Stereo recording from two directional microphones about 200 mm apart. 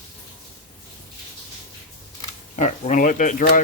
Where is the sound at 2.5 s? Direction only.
40° left (ahead or behind).